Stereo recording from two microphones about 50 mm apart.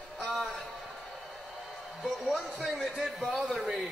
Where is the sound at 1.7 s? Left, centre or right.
Centre.